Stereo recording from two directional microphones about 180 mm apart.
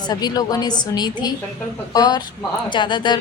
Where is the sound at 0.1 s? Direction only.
20° left (ahead or behind).